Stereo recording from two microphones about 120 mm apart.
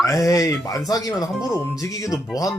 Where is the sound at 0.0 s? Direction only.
30° left (ahead or behind).